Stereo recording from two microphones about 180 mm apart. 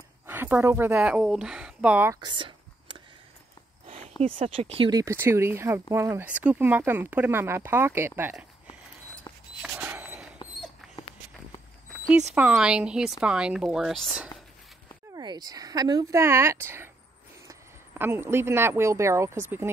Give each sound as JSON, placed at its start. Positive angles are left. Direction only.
{"t": 0.3, "sound": "speech", "side_deg": -10}
{"t": 2.1, "sound": "a sound", "side_deg": -25}
{"t": 4.2, "sound": "speech", "side_deg": -30}
{"t": 9.6, "sound": "a sound", "side_deg": -5}
{"t": 12.4, "sound": "speech", "side_deg": -5}
{"t": 15.1, "sound": "speech", "side_deg": -20}